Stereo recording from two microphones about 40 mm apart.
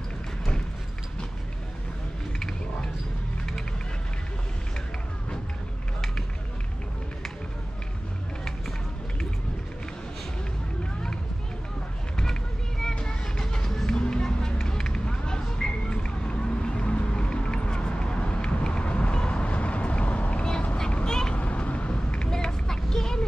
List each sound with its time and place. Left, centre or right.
12.2 s vehicle: centre
13.0 s music: centre
13.9 s a sound: left
20.9 s vehicle: centre
21.4 s vehicle: left
22.3 s a sound: centre